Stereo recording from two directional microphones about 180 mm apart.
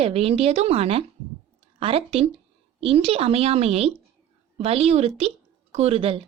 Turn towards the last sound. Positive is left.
turn(degrees=-35)  # may be behind; listen again after turning